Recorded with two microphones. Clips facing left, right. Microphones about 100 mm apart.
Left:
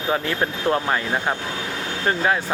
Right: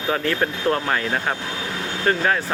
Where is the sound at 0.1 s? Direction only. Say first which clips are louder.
Right 1 dB; 15° left (ahead or behind).